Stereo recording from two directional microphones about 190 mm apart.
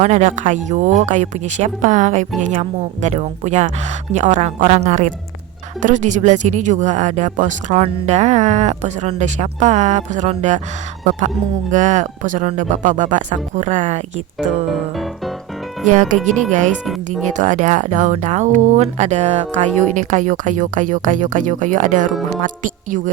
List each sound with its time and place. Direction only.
0.0 s speech: 40° right (ahead or behind)
11.7 s speech: 40° right (ahead or behind)
15.9 s speech: 40° right (ahead or behind)